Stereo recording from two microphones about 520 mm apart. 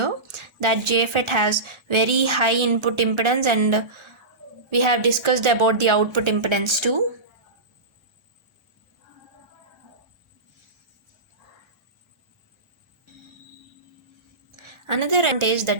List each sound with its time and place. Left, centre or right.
0.0 s a woman's voice: right
14.5 s a woman's voice: right